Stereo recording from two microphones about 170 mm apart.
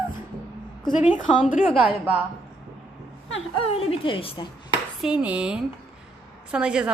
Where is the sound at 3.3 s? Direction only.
35° left (ahead or behind).